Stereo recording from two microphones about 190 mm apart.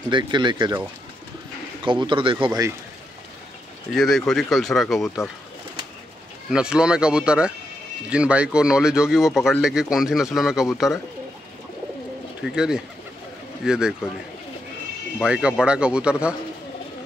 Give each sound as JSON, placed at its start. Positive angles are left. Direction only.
{"t": 0.1, "sound": "speech", "side_deg": -25}
{"t": 1.9, "sound": "speech", "side_deg": -25}
{"t": 3.9, "sound": "speech", "side_deg": 0}
{"t": 6.5, "sound": "speech", "side_deg": -5}
{"t": 12.4, "sound": "speech", "side_deg": -5}
{"t": 15.2, "sound": "speech", "side_deg": -5}